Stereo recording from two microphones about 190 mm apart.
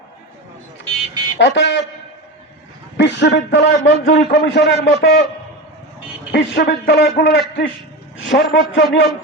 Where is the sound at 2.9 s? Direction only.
70° left (ahead or behind).